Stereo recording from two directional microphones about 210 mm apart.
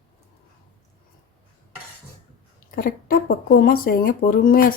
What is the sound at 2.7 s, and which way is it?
Speech, 45° left (ahead or behind).